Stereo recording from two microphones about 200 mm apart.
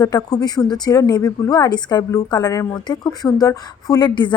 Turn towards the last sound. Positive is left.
turn(degrees=20)  # may be behind; listen again after turning